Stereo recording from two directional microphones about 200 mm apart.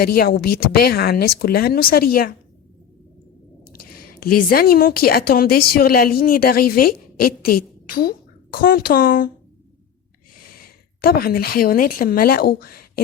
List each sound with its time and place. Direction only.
0.0 s speech: 50° left (ahead or behind)
3.7 s a woman's voice: 50° left (ahead or behind)
10.5 s speech: 50° left (ahead or behind)